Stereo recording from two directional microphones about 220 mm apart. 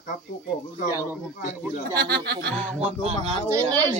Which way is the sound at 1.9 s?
45° right (ahead or behind).